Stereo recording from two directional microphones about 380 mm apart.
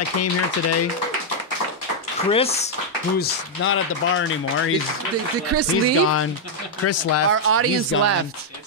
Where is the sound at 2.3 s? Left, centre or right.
Centre.